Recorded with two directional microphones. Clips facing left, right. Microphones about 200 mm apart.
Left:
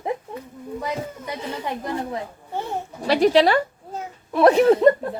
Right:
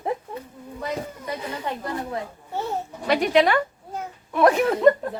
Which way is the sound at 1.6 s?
15° left (ahead or behind).